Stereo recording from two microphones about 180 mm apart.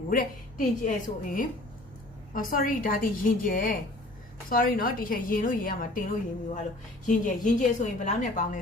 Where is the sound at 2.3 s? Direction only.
50° left (ahead or behind).